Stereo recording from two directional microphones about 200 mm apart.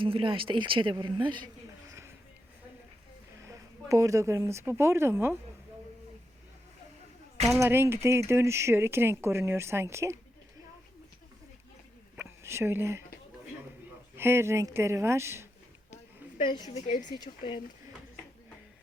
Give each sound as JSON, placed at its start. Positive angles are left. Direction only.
{"t": 0.0, "sound": "speech", "side_deg": -25}
{"t": 3.4, "sound": "speech", "side_deg": -15}
{"t": 7.6, "sound": "speech", "side_deg": -10}
{"t": 12.1, "sound": "a sound", "side_deg": -10}
{"t": 14.2, "sound": "speech", "side_deg": -10}
{"t": 16.5, "sound": "speech", "side_deg": 20}
{"t": 16.7, "sound": "speech", "side_deg": 35}
{"t": 17.1, "sound": "speech", "side_deg": 20}